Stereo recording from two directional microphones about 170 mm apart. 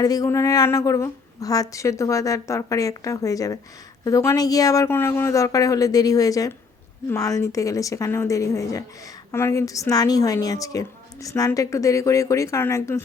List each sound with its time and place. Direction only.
0.0 s a woman's voice: 20° left (ahead or behind)